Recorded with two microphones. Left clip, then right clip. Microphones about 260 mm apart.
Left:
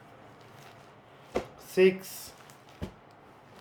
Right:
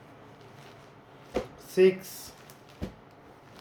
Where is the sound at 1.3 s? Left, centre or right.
Centre.